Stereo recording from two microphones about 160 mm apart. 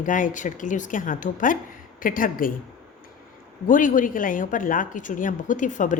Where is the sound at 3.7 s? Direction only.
55° left (ahead or behind).